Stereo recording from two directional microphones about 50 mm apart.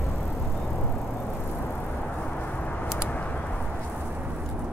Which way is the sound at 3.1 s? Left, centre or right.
Left.